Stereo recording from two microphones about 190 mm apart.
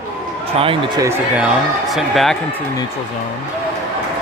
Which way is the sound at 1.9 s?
Centre (ahead or behind).